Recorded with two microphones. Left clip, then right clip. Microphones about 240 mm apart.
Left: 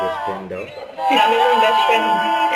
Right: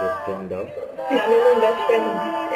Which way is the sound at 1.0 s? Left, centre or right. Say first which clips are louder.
Left 3 dB; centre.